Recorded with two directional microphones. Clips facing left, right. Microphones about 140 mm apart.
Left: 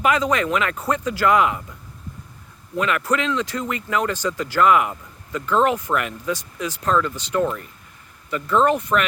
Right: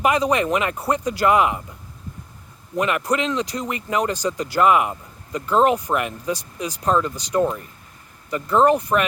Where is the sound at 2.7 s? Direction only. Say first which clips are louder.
Even; 15° right (ahead or behind).